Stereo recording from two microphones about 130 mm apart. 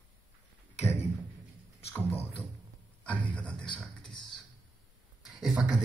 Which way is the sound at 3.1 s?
10° left (ahead or behind).